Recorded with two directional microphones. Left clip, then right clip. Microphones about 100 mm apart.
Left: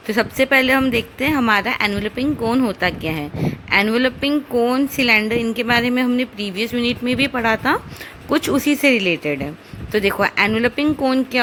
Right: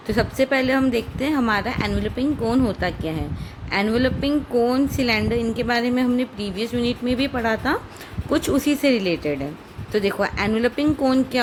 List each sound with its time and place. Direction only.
0.1 s a woman's voice: 30° left (ahead or behind)